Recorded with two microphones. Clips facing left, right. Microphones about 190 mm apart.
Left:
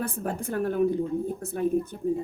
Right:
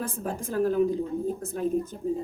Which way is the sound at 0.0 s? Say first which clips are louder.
Left 1 dB; 65° left (ahead or behind).